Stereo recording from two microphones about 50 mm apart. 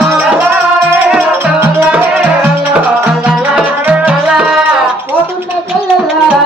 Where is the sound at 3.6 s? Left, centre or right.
Right.